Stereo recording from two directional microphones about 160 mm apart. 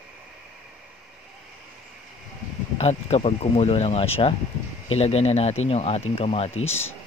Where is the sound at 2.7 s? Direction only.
40° left (ahead or behind).